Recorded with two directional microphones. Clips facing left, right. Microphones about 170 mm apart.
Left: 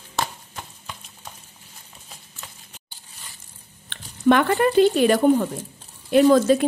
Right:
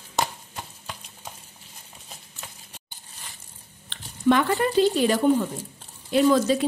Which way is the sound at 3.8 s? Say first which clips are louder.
Left 3 dB; 60° left (ahead or behind).